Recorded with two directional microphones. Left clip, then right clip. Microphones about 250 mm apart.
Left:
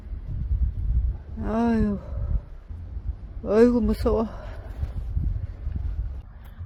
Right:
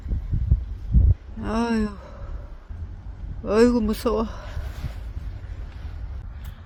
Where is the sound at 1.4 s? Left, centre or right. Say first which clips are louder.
Even; centre.